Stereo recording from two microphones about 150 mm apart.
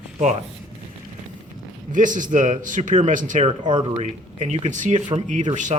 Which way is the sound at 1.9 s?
60° right (ahead or behind).